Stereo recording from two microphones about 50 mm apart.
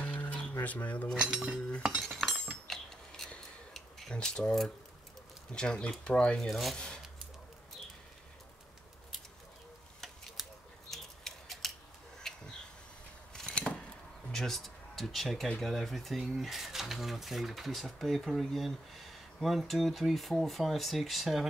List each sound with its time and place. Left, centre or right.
0.0 s a sound: left
1.1 s cutlery: centre
2.0 s cutlery: centre
4.1 s speech: centre
6.4 s speech: centre
10.4 s scissors: centre
10.9 s scissors: centre
12.2 s a sound: centre
14.3 s speech: centre